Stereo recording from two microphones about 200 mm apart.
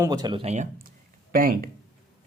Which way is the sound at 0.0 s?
20° right (ahead or behind).